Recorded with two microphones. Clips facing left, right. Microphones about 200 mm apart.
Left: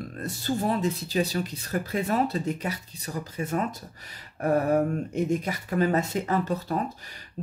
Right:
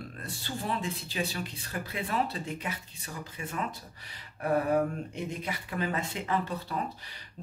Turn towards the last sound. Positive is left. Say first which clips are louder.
# left 5 dB
turn(degrees=45)  # may be behind; listen again after turning